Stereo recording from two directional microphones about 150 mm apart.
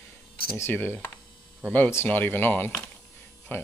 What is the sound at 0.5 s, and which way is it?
Speech, 15° left (ahead or behind).